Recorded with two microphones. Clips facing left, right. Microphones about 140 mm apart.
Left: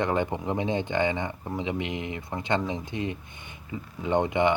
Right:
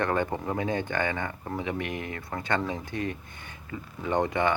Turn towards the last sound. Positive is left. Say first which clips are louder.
# left 2 dB
turn(degrees=20)  # may be behind; listen again after turning